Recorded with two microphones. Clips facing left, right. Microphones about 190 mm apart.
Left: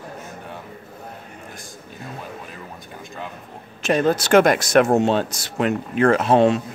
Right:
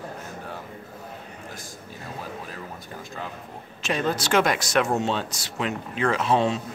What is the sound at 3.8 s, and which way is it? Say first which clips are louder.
Speech: left 7 dB; 50° left (ahead or behind).